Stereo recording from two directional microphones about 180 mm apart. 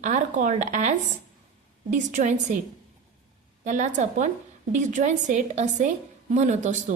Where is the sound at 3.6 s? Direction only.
45° right (ahead or behind).